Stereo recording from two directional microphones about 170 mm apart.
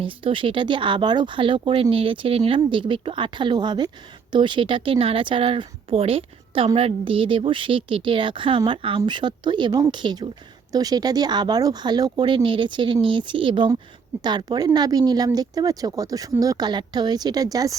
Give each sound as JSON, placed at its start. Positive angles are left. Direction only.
{"t": 0.0, "sound": "speech", "side_deg": -30}